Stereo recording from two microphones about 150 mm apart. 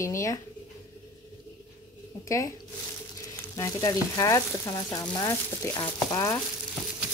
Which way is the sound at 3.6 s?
25° left (ahead or behind).